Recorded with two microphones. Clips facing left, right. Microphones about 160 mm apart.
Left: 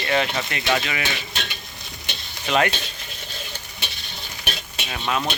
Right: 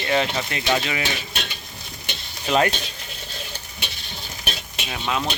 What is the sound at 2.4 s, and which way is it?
Speech, 30° right (ahead or behind).